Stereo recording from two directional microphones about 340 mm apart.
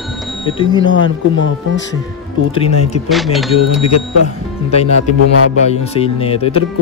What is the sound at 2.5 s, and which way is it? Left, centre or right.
Speech, centre.